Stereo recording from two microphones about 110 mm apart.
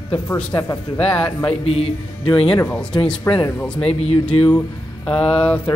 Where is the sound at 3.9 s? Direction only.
65° left (ahead or behind).